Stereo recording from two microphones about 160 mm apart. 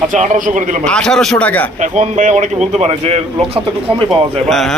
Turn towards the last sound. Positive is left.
turn(degrees=0)  # may be behind; listen again after turning